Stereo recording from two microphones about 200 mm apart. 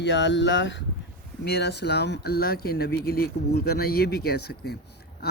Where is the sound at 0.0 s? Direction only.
60° left (ahead or behind).